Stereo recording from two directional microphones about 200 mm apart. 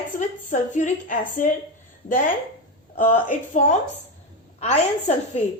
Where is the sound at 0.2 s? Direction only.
40° left (ahead or behind).